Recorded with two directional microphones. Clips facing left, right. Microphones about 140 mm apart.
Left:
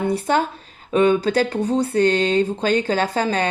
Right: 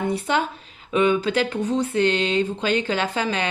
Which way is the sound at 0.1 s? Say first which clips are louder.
Left 3 dB; 40° left (ahead or behind).